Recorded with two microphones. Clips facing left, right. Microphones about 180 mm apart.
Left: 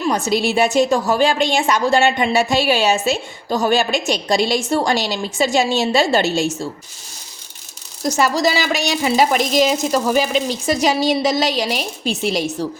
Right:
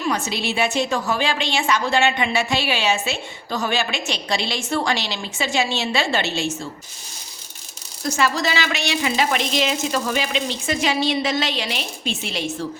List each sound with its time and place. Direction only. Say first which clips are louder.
0.1 s a woman's voice: left 8 dB; 45° left (ahead or behind)
8.0 s a woman's voice: left 5 dB; 40° left (ahead or behind)